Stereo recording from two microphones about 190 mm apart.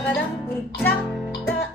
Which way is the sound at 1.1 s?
Centre (ahead or behind).